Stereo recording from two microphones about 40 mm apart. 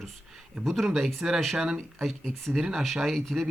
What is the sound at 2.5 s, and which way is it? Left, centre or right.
Speech, centre.